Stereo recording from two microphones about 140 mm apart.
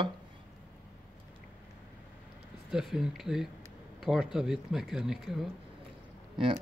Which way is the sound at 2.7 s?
5° right (ahead or behind).